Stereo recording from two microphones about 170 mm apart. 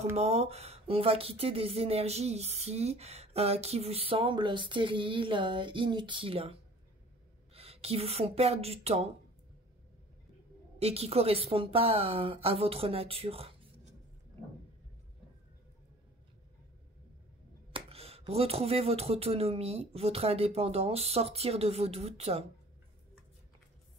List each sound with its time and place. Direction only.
0.1 s speech: 40° right (ahead or behind)
7.5 s speech: 35° right (ahead or behind)
10.8 s speech: 35° right (ahead or behind)
17.7 s speech: 35° right (ahead or behind)